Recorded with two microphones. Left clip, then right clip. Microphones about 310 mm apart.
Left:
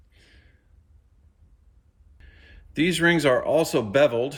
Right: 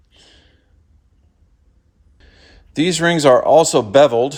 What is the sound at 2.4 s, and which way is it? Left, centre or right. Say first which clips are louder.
Speech: right 5 dB; centre.